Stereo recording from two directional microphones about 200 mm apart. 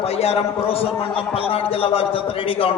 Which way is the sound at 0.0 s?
30° left (ahead or behind).